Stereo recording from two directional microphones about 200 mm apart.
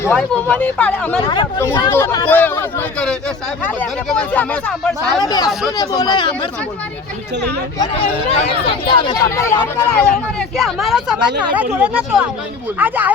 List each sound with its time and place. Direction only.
0.0 s speech: 5° left (ahead or behind)
1.2 s speech: 20° left (ahead or behind); by 4.4 s 5° left (ahead or behind)
5.2 s speech: 20° left (ahead or behind)
7.8 s speech: 30° left (ahead or behind); by 10.2 s 10° left (ahead or behind)
10.6 s speech: centre (ahead or behind)